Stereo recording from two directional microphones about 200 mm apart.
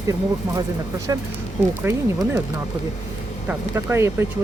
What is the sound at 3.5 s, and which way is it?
Speech, 15° right (ahead or behind).